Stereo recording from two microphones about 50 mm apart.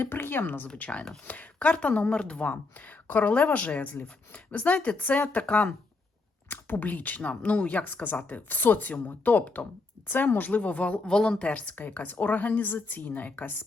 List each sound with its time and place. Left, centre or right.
0.0 s speech: left
0.8 s a woman's voice: left
6.5 s a woman's voice: left
11.8 s a woman's voice: left